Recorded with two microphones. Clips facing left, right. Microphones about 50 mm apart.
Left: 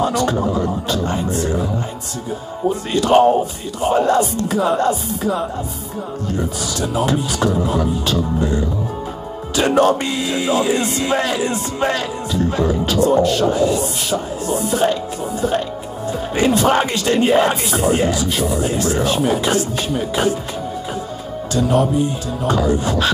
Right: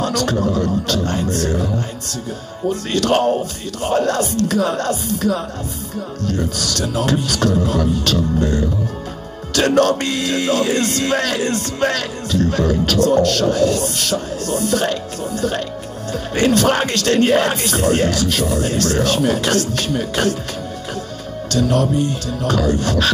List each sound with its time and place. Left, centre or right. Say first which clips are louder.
0.0 s speech: left 1 dB; centre
3.0 s speech: left 4 dB; centre
16.1 s speech: even; centre
21.5 s music: left 1 dB; centre
22.0 s speech: even; centre